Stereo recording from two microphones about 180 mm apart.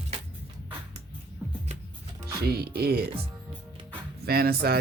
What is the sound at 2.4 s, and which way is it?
Speech, 60° right (ahead or behind).